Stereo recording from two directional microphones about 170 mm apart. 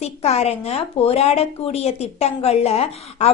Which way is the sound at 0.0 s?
40° left (ahead or behind).